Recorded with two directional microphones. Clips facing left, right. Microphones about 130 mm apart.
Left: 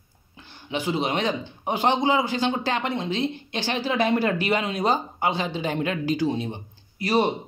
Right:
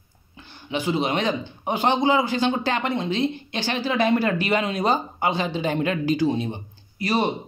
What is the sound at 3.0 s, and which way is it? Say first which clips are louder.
Speech: right 2 dB; 30° left (ahead or behind).